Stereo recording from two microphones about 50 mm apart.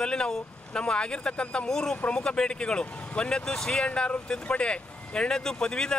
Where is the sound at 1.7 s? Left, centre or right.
Centre.